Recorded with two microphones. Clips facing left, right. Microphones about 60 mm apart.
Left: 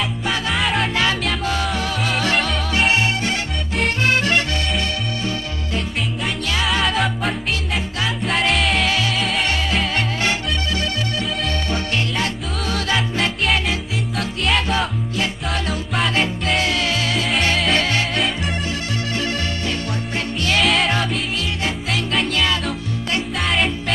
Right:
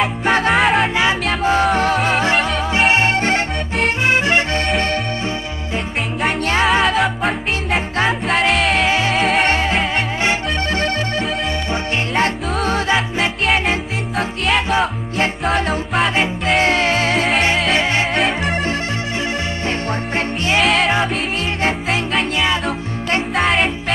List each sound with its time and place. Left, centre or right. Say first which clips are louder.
0.0 s music: right 7 dB; right
1.4 s music: right 7 dB; right
4.0 s music: right 2 dB; right
6.4 s music: right 6 dB; right
6.8 s music: right 4 dB; centre
8.8 s music: right 4 dB; right
9.1 s music: right 6 dB; right
10.7 s music: right 4 dB; right
15.5 s music: right 5 dB; right
18.2 s music: right 5 dB; centre
20.6 s music: right 3 dB; centre
23.4 s music: right 3 dB; centre